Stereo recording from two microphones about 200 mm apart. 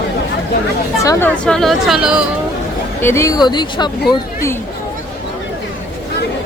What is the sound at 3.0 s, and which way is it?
Speech, 15° left (ahead or behind).